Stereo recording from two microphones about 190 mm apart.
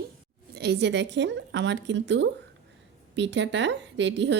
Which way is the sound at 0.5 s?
60° right (ahead or behind).